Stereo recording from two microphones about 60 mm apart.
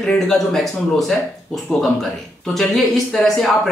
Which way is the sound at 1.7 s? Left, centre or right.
Right.